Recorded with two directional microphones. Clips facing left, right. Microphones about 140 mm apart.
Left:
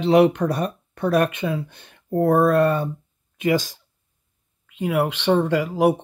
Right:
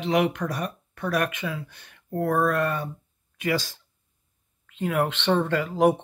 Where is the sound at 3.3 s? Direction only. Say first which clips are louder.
Left 6 dB; 20° left (ahead or behind).